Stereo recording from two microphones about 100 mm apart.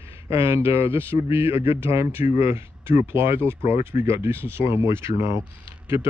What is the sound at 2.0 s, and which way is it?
A man's voice, 25° right (ahead or behind).